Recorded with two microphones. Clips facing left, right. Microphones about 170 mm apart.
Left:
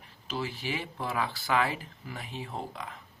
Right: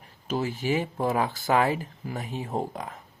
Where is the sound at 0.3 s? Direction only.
45° right (ahead or behind).